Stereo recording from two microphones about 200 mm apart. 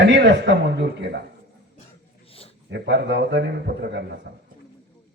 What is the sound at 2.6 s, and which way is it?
A man's voice, 60° right (ahead or behind).